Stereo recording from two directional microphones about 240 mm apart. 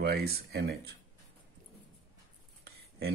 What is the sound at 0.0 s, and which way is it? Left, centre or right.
Speech, right.